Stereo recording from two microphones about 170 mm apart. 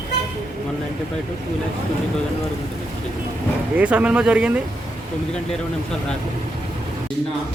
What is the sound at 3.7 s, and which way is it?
Speech, 5° right (ahead or behind).